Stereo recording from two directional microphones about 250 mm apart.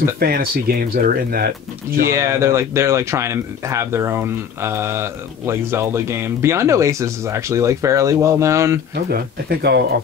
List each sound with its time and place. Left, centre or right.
0.2 s speech: right
2.0 s speech: centre
8.9 s speech: right